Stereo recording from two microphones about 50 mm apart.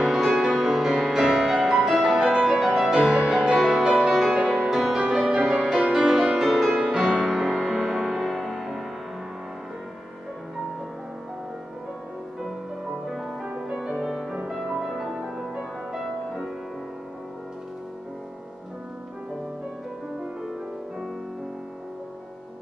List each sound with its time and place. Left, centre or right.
0.0 s music: centre
2.4 s music: centre
3.2 s music: centre
13.0 s music: centre
13.4 s music: centre